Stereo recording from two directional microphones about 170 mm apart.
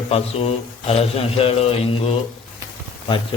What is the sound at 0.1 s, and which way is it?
Mantra, 35° left (ahead or behind).